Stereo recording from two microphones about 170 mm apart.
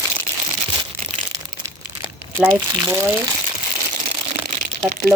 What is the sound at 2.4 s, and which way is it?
Speech, 15° right (ahead or behind).